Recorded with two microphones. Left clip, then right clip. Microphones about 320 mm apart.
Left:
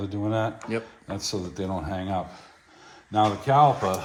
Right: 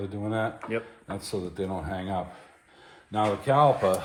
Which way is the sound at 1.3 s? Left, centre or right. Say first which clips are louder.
Left 1 dB; left.